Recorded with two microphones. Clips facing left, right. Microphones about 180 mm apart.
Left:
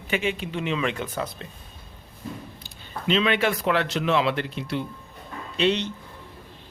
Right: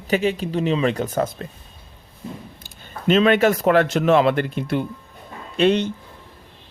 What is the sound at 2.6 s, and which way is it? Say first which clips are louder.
Speech: right 6 dB; 45° right (ahead or behind).